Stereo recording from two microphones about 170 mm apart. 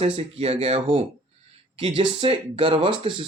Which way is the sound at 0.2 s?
35° right (ahead or behind).